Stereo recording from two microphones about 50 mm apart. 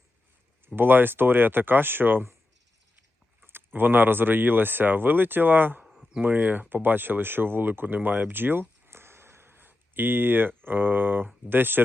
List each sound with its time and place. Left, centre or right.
0.8 s speech: right
3.4 s speech: right
5.8 s a sound: centre
6.2 s speech: right
8.9 s a sound: right
11.4 s speech: right